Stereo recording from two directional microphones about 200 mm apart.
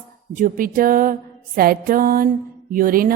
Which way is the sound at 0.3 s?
45° right (ahead or behind).